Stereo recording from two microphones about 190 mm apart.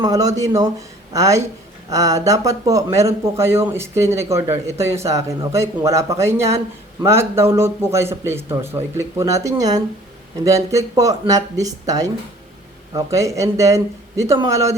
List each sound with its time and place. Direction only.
0.0 s speech: 20° right (ahead or behind)